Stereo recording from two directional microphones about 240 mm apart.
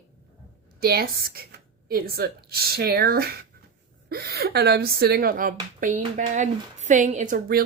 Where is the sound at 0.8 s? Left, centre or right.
Right.